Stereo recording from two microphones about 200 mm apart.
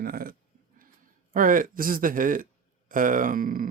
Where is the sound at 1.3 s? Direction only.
45° right (ahead or behind).